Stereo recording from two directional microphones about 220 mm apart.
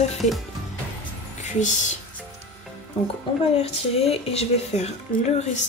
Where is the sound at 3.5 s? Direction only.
25° left (ahead or behind).